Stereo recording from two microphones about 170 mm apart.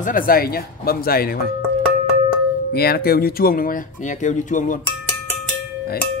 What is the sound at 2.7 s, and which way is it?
Speech, 65° left (ahead or behind).